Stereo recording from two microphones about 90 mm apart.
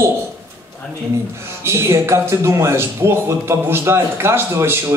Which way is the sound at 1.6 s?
30° right (ahead or behind).